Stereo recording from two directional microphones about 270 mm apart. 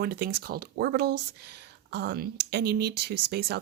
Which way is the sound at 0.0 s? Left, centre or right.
Right.